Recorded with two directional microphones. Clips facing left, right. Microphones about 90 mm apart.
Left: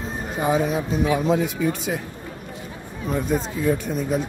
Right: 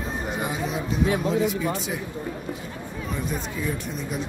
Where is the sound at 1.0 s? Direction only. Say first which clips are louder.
Left 1 dB; 70° left (ahead or behind).